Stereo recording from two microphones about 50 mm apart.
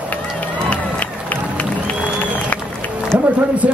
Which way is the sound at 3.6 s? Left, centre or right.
Right.